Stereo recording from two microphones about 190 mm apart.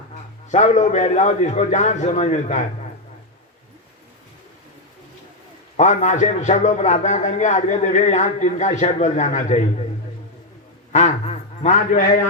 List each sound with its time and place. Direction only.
0.5 s a man's voice: 40° left (ahead or behind)
5.7 s a man's voice: 40° left (ahead or behind)
10.9 s a man's voice: 35° left (ahead or behind)